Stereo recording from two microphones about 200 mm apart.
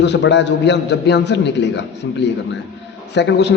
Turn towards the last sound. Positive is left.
turn(degrees=60)  # may be behind; listen again after turning